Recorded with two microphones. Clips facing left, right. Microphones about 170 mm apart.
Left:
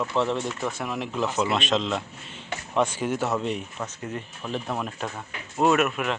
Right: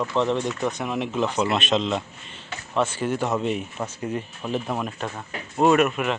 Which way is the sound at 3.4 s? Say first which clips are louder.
Right 3 dB; 5° right (ahead or behind).